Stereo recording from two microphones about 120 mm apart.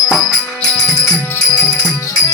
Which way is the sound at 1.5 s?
10° left (ahead or behind).